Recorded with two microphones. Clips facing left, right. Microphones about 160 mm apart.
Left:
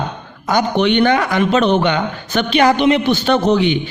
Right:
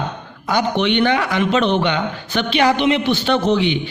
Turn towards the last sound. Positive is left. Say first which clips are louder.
# left 3 dB
turn(degrees=45)  # may be behind; listen again after turning